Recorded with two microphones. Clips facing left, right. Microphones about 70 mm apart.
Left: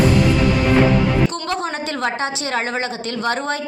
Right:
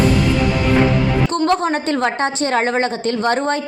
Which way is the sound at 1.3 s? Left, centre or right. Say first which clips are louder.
Right 7 dB; right.